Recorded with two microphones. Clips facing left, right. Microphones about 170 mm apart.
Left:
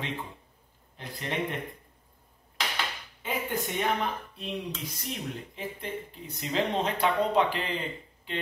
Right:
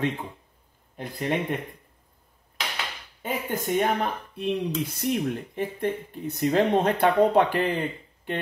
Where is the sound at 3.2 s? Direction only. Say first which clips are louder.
Right 2 dB; 45° right (ahead or behind).